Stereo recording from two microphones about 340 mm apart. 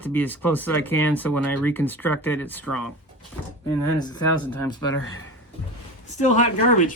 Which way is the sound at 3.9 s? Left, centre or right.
Centre.